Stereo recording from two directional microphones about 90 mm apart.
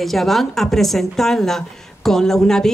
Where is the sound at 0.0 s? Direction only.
Centre (ahead or behind).